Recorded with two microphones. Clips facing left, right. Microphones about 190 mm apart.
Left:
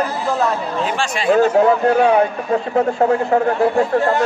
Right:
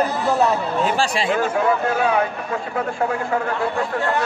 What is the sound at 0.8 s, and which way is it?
Speech, 35° right (ahead or behind).